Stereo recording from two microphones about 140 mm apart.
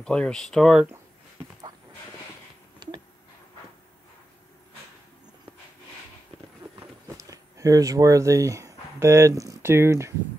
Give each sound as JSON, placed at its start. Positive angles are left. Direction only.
{"t": 0.0, "sound": "speech", "side_deg": 5}
{"t": 7.2, "sound": "speech", "side_deg": -25}